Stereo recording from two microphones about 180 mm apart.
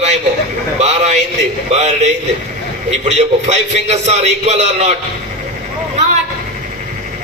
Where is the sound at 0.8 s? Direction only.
40° right (ahead or behind).